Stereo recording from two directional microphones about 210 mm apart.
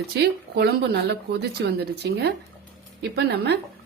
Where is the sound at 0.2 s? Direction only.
50° right (ahead or behind).